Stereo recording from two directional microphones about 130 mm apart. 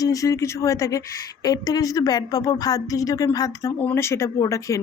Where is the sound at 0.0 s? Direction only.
25° left (ahead or behind).